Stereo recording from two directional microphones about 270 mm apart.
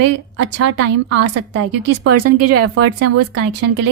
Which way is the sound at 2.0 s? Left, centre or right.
Right.